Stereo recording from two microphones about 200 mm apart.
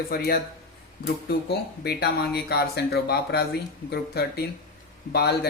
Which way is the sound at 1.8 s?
50° left (ahead or behind).